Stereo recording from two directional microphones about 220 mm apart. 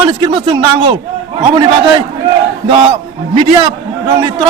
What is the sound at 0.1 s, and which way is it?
Speech, 20° right (ahead or behind).